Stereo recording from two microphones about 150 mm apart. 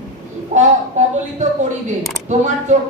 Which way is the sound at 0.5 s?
55° right (ahead or behind).